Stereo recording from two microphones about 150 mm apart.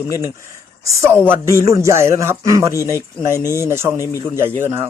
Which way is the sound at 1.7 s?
20° right (ahead or behind).